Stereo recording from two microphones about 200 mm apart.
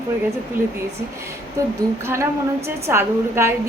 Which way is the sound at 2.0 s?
15° right (ahead or behind).